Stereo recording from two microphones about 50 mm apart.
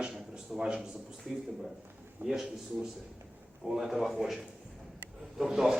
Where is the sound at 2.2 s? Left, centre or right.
Right.